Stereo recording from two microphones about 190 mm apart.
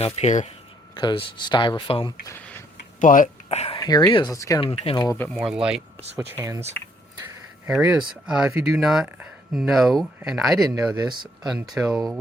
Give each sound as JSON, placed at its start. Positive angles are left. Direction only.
{"t": 0.0, "sound": "speech", "side_deg": 35}
{"t": 0.9, "sound": "speech", "side_deg": 25}
{"t": 2.2, "sound": "a sound", "side_deg": 15}
{"t": 3.0, "sound": "speech", "side_deg": 45}
{"t": 3.8, "sound": "speech", "side_deg": 20}
{"t": 4.6, "sound": "speech", "side_deg": 30}
{"t": 5.3, "sound": "speech", "side_deg": 0}
{"t": 6.1, "sound": "speech", "side_deg": -15}
{"t": 7.7, "sound": "speech", "side_deg": -5}
{"t": 10.6, "sound": "speech", "side_deg": -20}
{"t": 11.8, "sound": "speech", "side_deg": -10}